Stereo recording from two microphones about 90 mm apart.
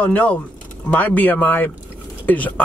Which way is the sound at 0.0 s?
15° left (ahead or behind).